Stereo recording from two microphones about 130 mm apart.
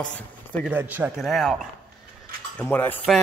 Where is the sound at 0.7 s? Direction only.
15° right (ahead or behind).